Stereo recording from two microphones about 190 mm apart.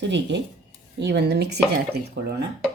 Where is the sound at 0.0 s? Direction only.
70° right (ahead or behind).